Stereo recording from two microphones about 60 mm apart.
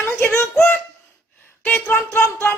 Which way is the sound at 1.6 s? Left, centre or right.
Left.